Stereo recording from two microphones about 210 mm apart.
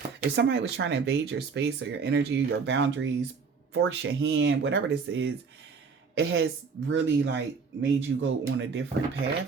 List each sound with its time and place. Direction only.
0.2 s speech: 50° right (ahead or behind)